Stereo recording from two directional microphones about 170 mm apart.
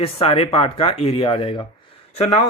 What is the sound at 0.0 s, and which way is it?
Speech, 35° left (ahead or behind).